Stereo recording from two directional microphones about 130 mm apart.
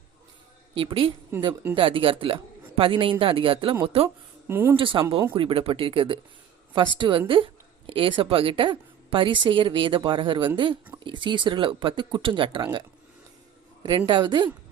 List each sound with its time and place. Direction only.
0.7 s a woman's voice: 40° right (ahead or behind)
1.3 s speech: 20° right (ahead or behind)
1.7 s a woman's voice: 40° right (ahead or behind)
4.4 s speech: 15° right (ahead or behind)
4.8 s a woman's voice: 40° right (ahead or behind)
13.8 s a woman's voice: 35° right (ahead or behind)